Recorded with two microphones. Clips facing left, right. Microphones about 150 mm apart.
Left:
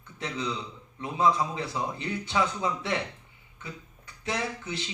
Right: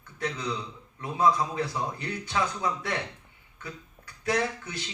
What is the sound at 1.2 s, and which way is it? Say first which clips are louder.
A man's voice: right 1 dB; 25° left (ahead or behind).